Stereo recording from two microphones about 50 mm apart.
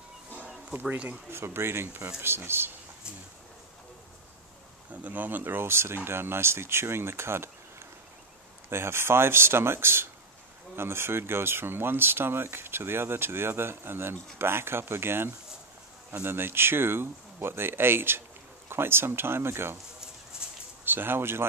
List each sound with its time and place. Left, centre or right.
1.3 s speech: right
5.0 s speech: right
8.6 s speech: right
20.8 s speech: right